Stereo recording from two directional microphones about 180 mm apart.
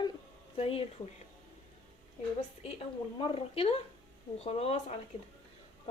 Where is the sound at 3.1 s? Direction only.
30° left (ahead or behind).